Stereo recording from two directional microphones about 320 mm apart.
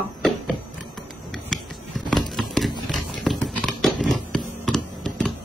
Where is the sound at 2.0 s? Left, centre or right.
Centre.